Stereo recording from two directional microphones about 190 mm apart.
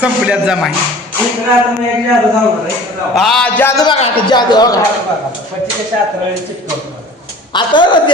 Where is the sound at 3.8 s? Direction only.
25° left (ahead or behind).